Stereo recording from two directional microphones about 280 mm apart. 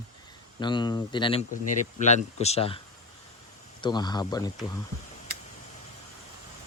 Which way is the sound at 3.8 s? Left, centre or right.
Centre.